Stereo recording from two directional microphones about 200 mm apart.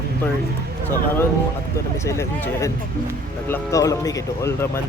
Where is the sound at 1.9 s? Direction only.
15° left (ahead or behind).